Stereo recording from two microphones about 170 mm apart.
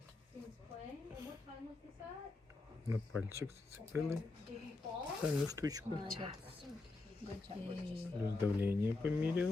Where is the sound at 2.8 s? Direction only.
15° right (ahead or behind).